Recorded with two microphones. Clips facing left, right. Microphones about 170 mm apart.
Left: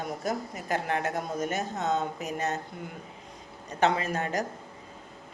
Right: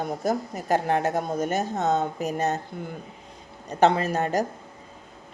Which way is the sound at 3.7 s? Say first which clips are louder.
Right 5 dB; 35° right (ahead or behind).